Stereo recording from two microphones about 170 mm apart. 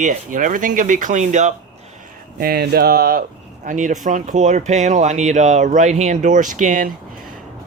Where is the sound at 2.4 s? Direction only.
65° right (ahead or behind).